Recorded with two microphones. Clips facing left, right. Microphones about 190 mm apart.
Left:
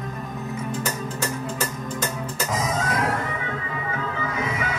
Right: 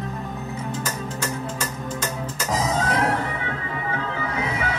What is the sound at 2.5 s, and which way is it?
Music, 35° right (ahead or behind).